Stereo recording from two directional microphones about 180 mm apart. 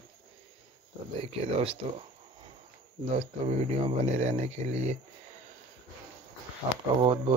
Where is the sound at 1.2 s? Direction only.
30° right (ahead or behind).